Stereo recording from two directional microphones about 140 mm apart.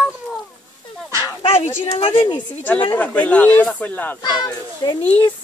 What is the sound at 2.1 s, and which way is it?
Speech, 30° left (ahead or behind).